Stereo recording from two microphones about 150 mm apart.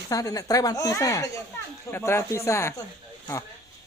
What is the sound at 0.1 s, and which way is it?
A man's voice, 25° left (ahead or behind).